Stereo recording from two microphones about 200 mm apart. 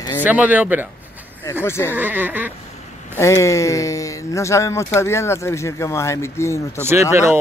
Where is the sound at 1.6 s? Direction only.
15° left (ahead or behind).